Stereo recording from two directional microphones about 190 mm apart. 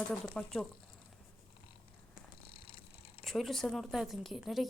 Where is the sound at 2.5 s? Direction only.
30° left (ahead or behind).